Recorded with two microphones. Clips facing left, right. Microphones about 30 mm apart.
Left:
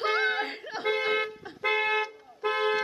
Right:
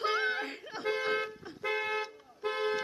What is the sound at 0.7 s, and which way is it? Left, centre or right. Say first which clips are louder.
Toot: left 4 dB; left.